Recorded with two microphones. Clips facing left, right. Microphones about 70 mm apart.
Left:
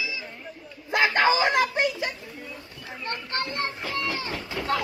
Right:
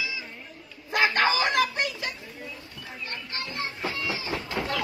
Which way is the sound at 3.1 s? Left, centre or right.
Left.